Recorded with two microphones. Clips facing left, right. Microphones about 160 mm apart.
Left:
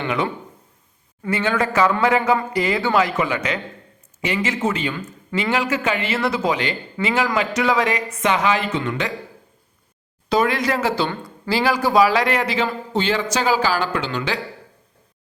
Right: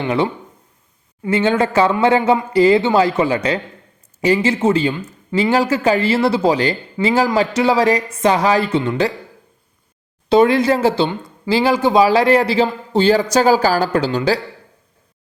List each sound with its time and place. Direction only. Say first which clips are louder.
1.2 s speech: right 5 dB; 25° right (ahead or behind)
10.2 s speech: right 7 dB; 25° right (ahead or behind)